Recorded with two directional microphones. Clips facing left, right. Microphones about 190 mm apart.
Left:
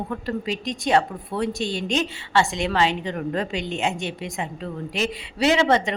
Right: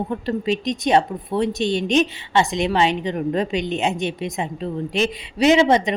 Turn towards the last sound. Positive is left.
turn(degrees=-15)  # may be behind; listen again after turning